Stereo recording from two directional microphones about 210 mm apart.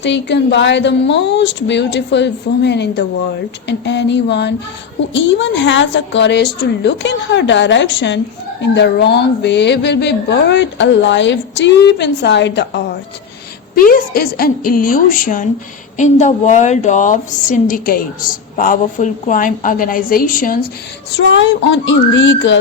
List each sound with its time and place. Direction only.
0.0 s speech: 55° left (ahead or behind)
13.7 s a woman's voice: 40° left (ahead or behind)
21.3 s speech: 60° left (ahead or behind)